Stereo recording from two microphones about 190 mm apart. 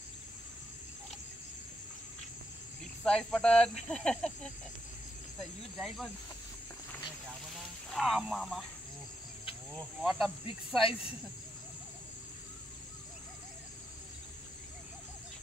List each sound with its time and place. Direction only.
3.0 s speech: 5° left (ahead or behind)
7.9 s speech: centre (ahead or behind)
9.8 s speech: centre (ahead or behind)
10.8 s speech: 30° left (ahead or behind)